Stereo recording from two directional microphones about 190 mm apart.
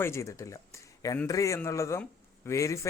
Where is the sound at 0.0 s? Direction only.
15° left (ahead or behind).